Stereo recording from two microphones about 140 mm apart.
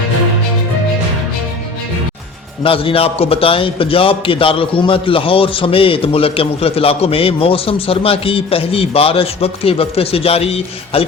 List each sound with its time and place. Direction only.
2.6 s a man's voice: 40° left (ahead or behind)